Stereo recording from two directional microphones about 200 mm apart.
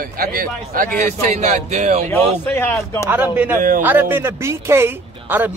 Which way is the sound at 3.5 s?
45° right (ahead or behind).